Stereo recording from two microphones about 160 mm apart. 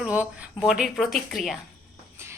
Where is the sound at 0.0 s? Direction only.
10° right (ahead or behind).